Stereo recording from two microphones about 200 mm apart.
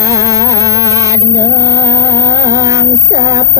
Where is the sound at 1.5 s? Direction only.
15° right (ahead or behind).